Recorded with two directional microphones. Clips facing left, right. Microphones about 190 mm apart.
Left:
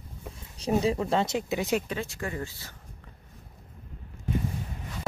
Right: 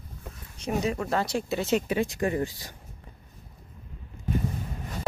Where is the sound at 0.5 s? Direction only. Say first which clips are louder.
Left 3 dB; 30° left (ahead or behind); by 1.8 s 15° left (ahead or behind).